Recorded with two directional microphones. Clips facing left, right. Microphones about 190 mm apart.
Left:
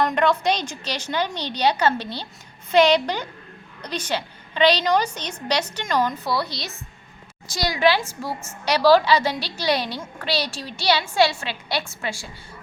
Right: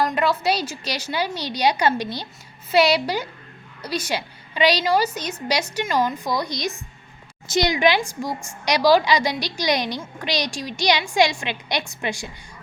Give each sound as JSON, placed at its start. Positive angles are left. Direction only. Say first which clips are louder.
{"t": 0.0, "sound": "a woman's voice", "louder": "left 1 dB", "side_deg": -5}